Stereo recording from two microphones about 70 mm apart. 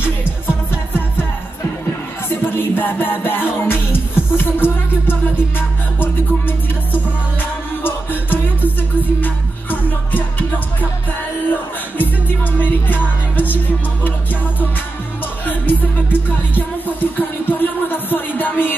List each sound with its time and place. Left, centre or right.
0.0 s music: left
2.2 s music: left
12.0 s music: left
15.4 s music: left